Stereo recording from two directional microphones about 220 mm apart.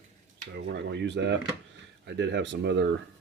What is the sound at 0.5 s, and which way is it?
Speech, 50° right (ahead or behind).